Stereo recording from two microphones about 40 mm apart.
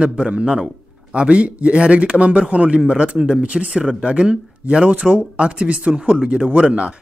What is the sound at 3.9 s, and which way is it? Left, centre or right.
Speech, right.